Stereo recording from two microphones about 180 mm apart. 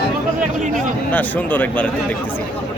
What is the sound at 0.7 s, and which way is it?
Speech, 10° left (ahead or behind).